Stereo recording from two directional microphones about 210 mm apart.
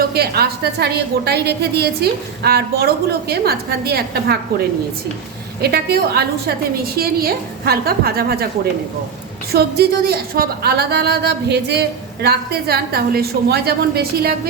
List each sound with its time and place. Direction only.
0.1 s a woman's voice: 50° right (ahead or behind)
5.6 s a woman's voice: 50° right (ahead or behind)
9.5 s a woman's voice: 50° right (ahead or behind)